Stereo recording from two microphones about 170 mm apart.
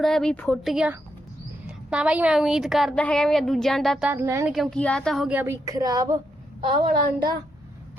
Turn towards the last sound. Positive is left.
turn(degrees=-30)  # may be behind; listen again after turning